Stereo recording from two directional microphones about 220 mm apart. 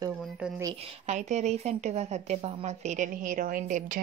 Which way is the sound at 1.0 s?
30° right (ahead or behind).